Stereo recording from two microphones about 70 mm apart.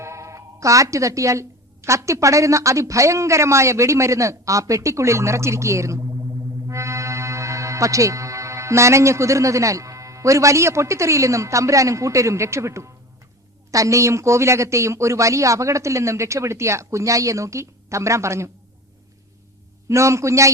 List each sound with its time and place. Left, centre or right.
0.0 s speech: right
19.9 s speech: right